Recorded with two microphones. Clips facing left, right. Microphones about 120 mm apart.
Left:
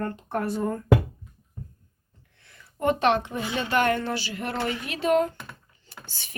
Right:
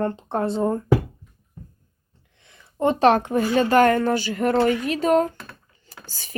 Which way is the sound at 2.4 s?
25° right (ahead or behind).